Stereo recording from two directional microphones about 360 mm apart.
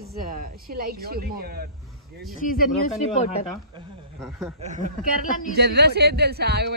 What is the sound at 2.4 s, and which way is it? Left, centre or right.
Speech, left.